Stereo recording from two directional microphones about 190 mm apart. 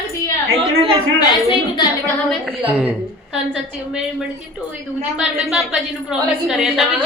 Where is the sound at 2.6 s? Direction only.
10° right (ahead or behind).